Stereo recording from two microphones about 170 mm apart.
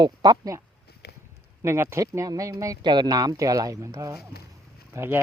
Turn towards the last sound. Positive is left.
turn(degrees=-15)  # may be behind; listen again after turning